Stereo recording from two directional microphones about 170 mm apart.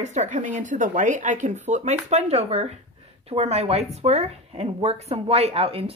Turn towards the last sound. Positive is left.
turn(degrees=-35)  # may be behind; listen again after turning